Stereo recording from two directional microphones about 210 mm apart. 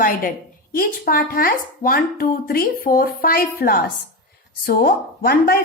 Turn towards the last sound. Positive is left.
turn(degrees=45)  # may be behind; listen again after turning